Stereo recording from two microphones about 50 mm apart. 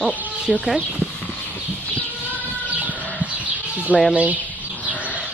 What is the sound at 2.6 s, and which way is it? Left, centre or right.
Chicken, right.